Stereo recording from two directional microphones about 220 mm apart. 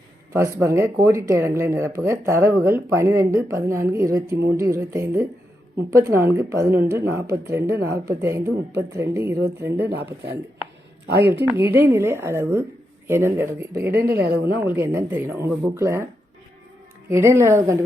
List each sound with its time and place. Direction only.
0.3 s speech: 15° right (ahead or behind)
11.1 s speech: 50° right (ahead or behind)
11.5 s speech: 10° right (ahead or behind)
14.1 s speech: 45° right (ahead or behind)
14.4 s speech: 10° right (ahead or behind)
17.1 s speech: 10° right (ahead or behind)